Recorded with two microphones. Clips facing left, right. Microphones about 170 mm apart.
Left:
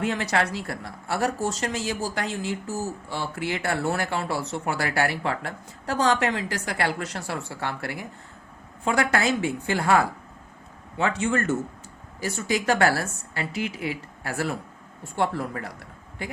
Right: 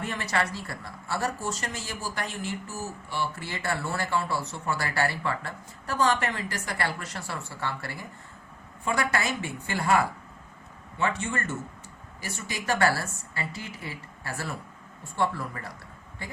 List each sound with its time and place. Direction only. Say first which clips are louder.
0.0 s speech: left 5 dB; 90° left; by 8.0 s 65° left (ahead or behind)
8.8 s speech: left 5 dB; 90° left; by 10.0 s 70° left (ahead or behind)
10.9 s a woman's voice: left 5 dB; 90° left; by 15.7 s 75° left (ahead or behind)